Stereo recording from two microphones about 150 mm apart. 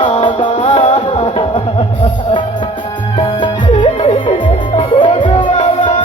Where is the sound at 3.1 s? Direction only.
35° left (ahead or behind).